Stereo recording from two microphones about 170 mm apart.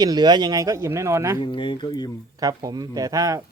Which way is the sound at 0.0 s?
25° right (ahead or behind).